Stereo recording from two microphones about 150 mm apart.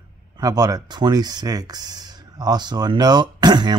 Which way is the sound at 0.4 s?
25° right (ahead or behind).